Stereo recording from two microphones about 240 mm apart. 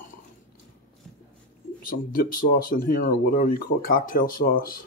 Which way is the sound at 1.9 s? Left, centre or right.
Left.